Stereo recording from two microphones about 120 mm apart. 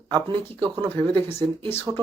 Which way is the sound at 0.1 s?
40° right (ahead or behind).